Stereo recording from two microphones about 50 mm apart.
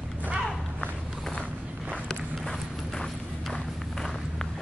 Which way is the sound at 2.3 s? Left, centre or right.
Centre.